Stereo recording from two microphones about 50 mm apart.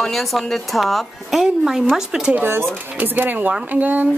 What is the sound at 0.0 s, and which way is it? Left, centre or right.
Speech, centre.